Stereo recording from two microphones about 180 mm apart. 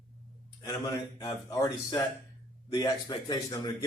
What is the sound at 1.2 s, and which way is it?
A man's voice, 20° left (ahead or behind).